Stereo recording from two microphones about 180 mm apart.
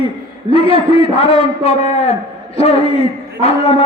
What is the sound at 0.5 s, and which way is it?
A man's voice, 30° left (ahead or behind).